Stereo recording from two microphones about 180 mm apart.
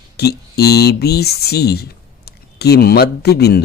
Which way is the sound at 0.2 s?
65° left (ahead or behind).